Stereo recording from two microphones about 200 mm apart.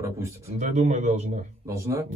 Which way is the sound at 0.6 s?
35° right (ahead or behind).